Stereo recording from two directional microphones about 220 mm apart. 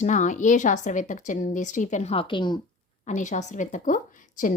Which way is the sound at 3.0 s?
35° left (ahead or behind).